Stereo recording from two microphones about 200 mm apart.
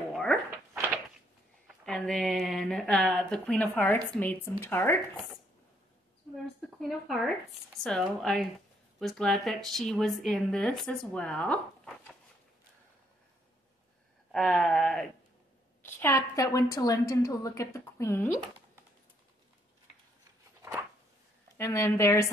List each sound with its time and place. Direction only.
0.1 s a sound: 5° left (ahead or behind)
1.9 s a woman's voice: 5° left (ahead or behind)
6.3 s a woman's voice: centre (ahead or behind)
14.3 s a woman's voice: 5° left (ahead or behind)
21.5 s a woman's voice: 15° left (ahead or behind)